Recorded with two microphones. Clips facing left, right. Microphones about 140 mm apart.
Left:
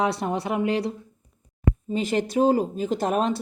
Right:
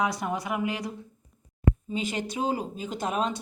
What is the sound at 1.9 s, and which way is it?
Speech, 45° left (ahead or behind).